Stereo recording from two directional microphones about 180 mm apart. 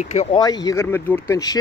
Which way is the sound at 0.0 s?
40° left (ahead or behind).